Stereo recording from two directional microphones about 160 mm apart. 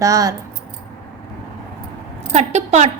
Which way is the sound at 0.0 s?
20° right (ahead or behind).